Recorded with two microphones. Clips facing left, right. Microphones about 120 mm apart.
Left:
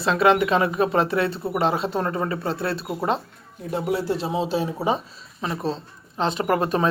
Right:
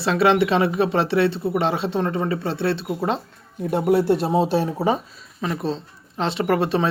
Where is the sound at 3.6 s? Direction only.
55° right (ahead or behind).